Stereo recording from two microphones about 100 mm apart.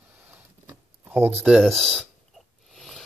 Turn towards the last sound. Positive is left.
turn(degrees=0)  # may be behind; listen again after turning